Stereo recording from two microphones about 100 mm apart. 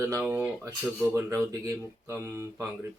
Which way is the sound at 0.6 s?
30° right (ahead or behind).